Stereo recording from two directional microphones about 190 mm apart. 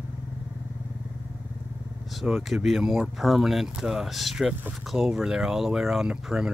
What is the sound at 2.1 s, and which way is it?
Speech, centre (ahead or behind).